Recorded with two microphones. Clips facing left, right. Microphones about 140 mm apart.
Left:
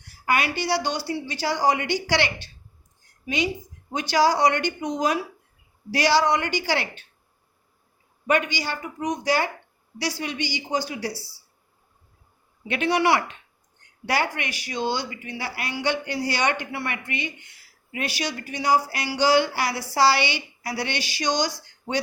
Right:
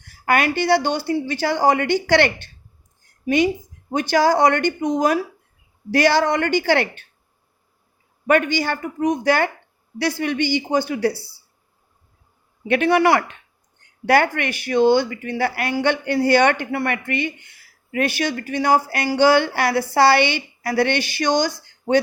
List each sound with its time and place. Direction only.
0.3 s speech: 55° right (ahead or behind)
8.3 s speech: 50° right (ahead or behind)
12.6 s speech: 55° right (ahead or behind)